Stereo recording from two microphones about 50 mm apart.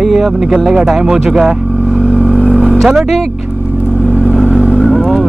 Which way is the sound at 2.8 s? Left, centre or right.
Centre.